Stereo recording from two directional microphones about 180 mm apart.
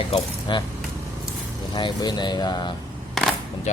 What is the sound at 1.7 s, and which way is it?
Speech, 25° left (ahead or behind).